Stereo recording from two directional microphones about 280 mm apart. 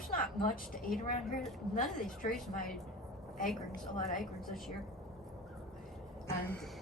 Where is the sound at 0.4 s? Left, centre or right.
Left.